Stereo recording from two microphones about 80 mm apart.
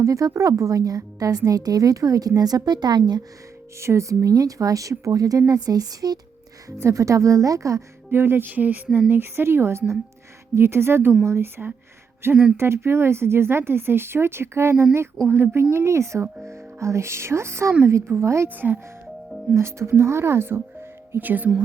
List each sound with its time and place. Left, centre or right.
0.0 s a woman's voice: right
3.8 s a woman's voice: right
6.8 s speech: right
8.1 s speech: right
18.4 s speech: right
19.5 s speech: right